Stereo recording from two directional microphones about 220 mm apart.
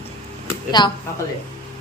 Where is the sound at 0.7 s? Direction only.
20° left (ahead or behind).